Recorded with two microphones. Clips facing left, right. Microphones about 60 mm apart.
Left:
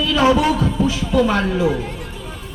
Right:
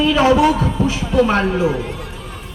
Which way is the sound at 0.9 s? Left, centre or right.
Right.